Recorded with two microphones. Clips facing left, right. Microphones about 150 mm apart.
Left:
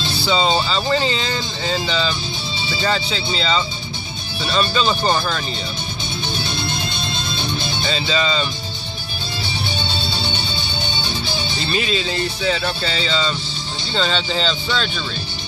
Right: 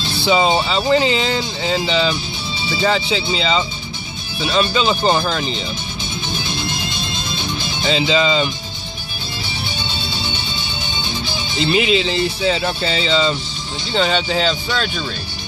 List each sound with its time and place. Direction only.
0.2 s speech: 20° right (ahead or behind)
6.3 s music: 35° left (ahead or behind)
8.1 s speech: 20° right (ahead or behind)
9.8 s music: 30° left (ahead or behind)
11.6 s speech: 20° right (ahead or behind)